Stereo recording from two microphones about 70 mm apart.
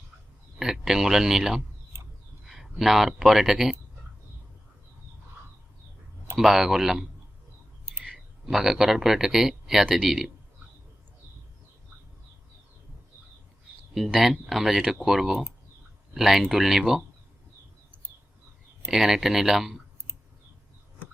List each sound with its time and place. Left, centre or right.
0.6 s speech: centre
1.9 s a sound: right
2.5 s speech: centre
6.3 s speech: centre
8.0 s speech: centre
13.9 s speech: centre
18.9 s speech: centre